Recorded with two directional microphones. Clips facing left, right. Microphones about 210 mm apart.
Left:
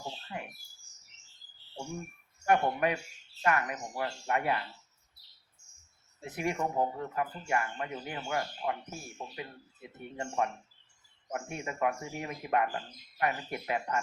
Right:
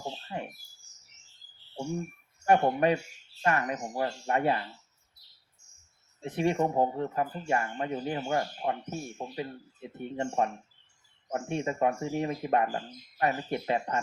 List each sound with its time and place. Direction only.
0.3 s speech: 30° right (ahead or behind)
2.5 s speech: 30° right (ahead or behind)
6.2 s speech: 30° right (ahead or behind)